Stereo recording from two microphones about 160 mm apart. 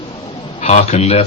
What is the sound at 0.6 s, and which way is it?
Speech, 40° left (ahead or behind).